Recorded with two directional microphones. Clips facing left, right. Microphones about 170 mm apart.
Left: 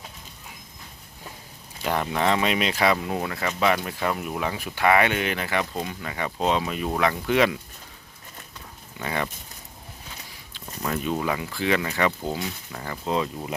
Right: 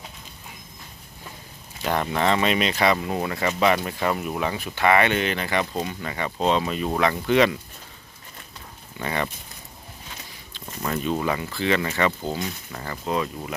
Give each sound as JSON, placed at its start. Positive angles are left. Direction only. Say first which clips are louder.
{"t": 1.8, "sound": "speech", "louder": "right 1 dB", "side_deg": 5}
{"t": 9.0, "sound": "speech", "louder": "right 1 dB", "side_deg": 5}
{"t": 10.8, "sound": "speech", "louder": "right 1 dB", "side_deg": 5}
{"t": 13.1, "sound": "speech", "louder": "even", "side_deg": 20}